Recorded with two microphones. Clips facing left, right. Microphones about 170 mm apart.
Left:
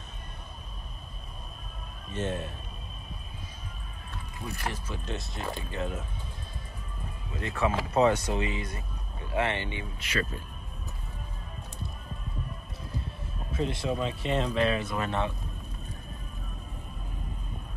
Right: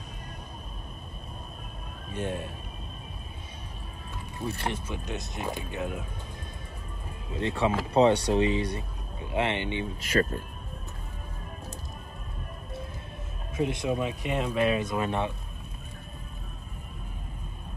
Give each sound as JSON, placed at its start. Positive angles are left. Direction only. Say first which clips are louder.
{"t": 4.5, "sound": "speech", "louder": "right 3 dB", "side_deg": -30}
{"t": 4.8, "sound": "speech", "louder": "right 1 dB", "side_deg": -20}
{"t": 7.3, "sound": "speech", "louder": "right 2 dB", "side_deg": -25}
{"t": 9.9, "sound": "speech", "louder": "right 6 dB", "side_deg": -45}
{"t": 13.5, "sound": "speech", "louder": "right 2 dB", "side_deg": -20}